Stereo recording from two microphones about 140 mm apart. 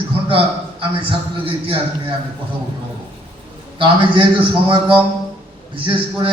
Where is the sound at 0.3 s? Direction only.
40° right (ahead or behind).